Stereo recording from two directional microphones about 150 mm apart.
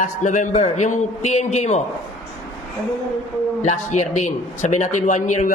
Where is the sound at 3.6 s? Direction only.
50° left (ahead or behind).